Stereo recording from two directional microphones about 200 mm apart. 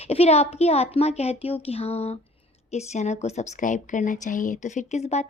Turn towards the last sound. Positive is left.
turn(degrees=35)  # may be behind; listen again after turning